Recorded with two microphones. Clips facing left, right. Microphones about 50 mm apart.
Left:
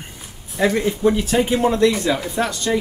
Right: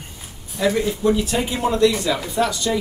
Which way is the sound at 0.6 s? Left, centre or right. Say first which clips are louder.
Left 1 dB; left.